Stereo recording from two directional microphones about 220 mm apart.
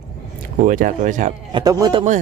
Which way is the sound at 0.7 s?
35° right (ahead or behind).